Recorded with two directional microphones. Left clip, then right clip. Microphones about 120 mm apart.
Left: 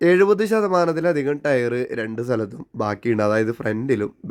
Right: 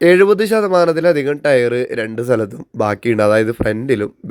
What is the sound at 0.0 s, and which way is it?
Speech, 15° right (ahead or behind).